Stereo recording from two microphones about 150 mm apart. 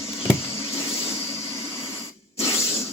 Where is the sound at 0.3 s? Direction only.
20° left (ahead or behind).